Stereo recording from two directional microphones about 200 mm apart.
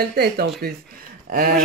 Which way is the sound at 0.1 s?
50° right (ahead or behind).